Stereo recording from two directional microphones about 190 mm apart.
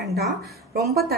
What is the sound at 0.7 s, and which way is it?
Speech, 55° right (ahead or behind).